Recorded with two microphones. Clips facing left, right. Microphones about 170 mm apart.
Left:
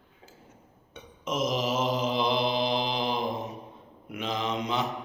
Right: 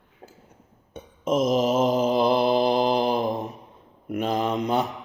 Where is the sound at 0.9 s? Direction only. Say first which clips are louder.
Right 8 dB; 50° right (ahead or behind).